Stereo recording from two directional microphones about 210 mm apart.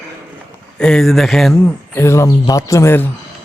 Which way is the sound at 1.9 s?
15° left (ahead or behind).